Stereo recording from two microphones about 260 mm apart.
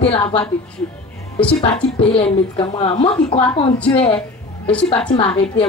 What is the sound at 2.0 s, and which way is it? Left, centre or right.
A woman's voice, left.